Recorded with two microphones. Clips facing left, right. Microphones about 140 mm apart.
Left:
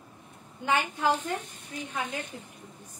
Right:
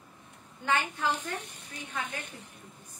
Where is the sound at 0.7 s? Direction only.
15° left (ahead or behind).